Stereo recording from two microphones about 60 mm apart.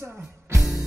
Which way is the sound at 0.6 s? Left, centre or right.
Centre.